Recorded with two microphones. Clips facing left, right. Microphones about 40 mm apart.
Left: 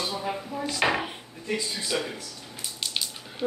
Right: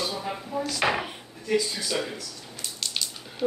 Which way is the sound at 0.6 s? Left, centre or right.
Left.